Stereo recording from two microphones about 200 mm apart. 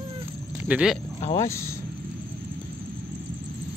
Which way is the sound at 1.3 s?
15° left (ahead or behind).